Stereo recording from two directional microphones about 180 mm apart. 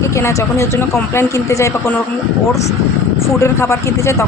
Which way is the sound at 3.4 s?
15° left (ahead or behind).